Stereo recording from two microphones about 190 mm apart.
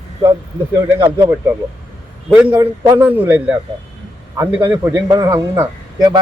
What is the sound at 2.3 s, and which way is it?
Speech, 10° right (ahead or behind).